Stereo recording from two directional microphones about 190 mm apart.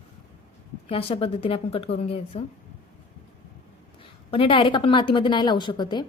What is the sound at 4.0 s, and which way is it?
A woman's voice, 30° left (ahead or behind).